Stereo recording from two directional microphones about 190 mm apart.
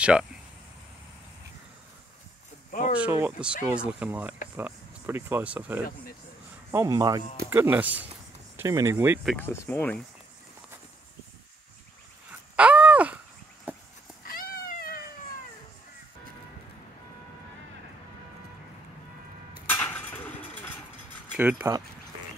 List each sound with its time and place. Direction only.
0.0 s speech: 5° right (ahead or behind)
3.0 s a man's voice: 10° right (ahead or behind)
9.3 s speech: 10° left (ahead or behind)
12.5 s a sound: 5° right (ahead or behind)
13.7 s goose: 10° right (ahead or behind)
14.2 s cat: 50° left (ahead or behind)
19.6 s vehicle: 10° left (ahead or behind)
21.3 s speech: 10° right (ahead or behind)